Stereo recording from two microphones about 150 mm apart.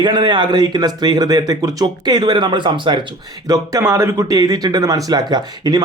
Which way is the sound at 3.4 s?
20° right (ahead or behind).